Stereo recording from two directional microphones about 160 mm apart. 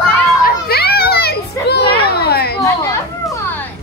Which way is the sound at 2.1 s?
85° left.